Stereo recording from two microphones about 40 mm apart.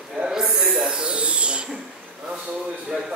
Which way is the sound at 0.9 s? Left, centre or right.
Right.